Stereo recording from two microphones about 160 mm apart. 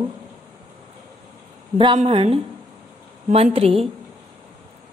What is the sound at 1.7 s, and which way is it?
A woman's voice, 35° right (ahead or behind).